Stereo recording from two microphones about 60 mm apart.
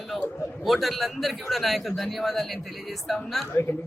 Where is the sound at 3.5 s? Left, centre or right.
Left.